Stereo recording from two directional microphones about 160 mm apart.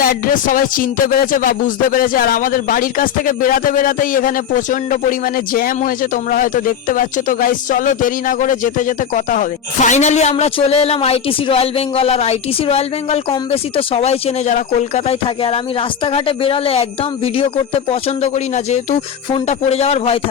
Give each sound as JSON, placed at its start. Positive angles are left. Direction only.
{"t": 0.0, "sound": "speech", "side_deg": 60}